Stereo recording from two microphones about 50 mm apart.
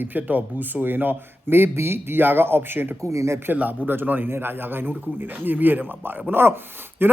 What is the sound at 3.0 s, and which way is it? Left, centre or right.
Speech, right.